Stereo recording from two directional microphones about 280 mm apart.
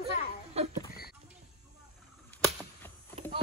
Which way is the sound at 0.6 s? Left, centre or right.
Right.